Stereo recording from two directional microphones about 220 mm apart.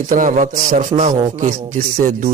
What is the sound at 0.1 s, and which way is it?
Speech, 35° right (ahead or behind).